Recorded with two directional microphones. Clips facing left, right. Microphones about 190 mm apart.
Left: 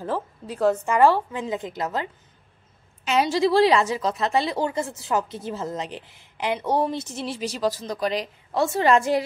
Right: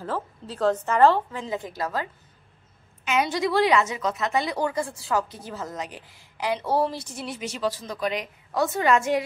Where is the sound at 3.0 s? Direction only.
30° left (ahead or behind).